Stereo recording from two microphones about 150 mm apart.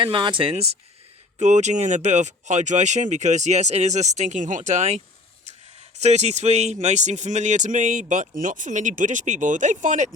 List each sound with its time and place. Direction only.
0.0 s speech: 35° right (ahead or behind); by 10.1 s 55° right (ahead or behind)